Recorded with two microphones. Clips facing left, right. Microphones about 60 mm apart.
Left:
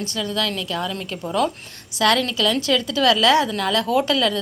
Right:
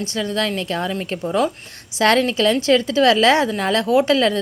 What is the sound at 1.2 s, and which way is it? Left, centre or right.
Speech, centre.